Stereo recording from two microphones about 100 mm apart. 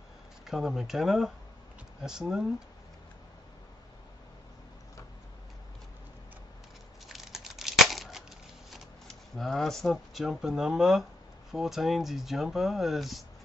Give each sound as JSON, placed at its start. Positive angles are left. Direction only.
{"t": 0.5, "sound": "speech", "side_deg": -5}
{"t": 7.1, "sound": "tearing", "side_deg": -5}
{"t": 8.6, "sound": "speech", "side_deg": 0}